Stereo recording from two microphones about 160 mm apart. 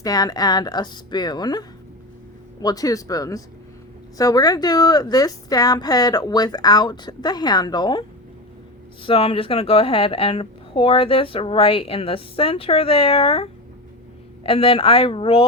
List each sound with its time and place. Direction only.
0.0 s a woman's voice: 25° left (ahead or behind)
9.0 s a woman's voice: 35° left (ahead or behind)